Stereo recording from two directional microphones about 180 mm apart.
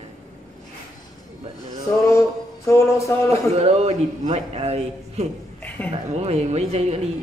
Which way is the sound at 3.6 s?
35° right (ahead or behind).